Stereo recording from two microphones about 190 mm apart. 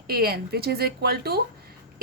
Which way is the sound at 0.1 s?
55° right (ahead or behind).